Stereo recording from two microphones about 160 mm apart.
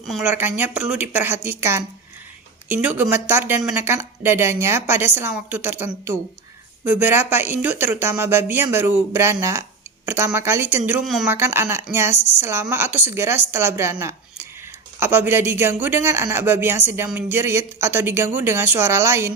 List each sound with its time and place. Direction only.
0.2 s speech: 10° right (ahead or behind)
11.0 s speech: centre (ahead or behind)
11.3 s speech: 15° right (ahead or behind)